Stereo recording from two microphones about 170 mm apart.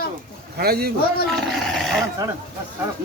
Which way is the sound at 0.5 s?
70° right (ahead or behind).